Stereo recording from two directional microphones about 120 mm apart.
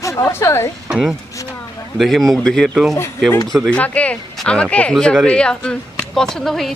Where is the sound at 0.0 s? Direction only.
25° left (ahead or behind).